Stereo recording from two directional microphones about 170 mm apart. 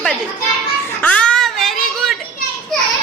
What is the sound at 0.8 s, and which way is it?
Music, 10° left (ahead or behind).